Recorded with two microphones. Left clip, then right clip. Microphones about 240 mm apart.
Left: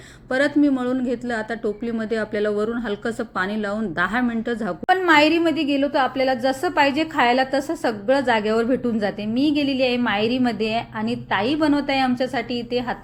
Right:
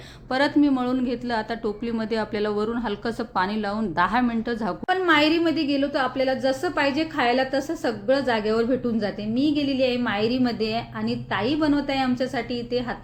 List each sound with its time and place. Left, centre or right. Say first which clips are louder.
0.3 s a woman's voice: left 2 dB; centre
4.9 s a woman's voice: left 4 dB; centre